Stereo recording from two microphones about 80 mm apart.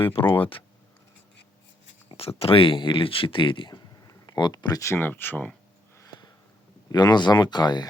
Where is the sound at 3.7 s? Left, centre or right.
Left.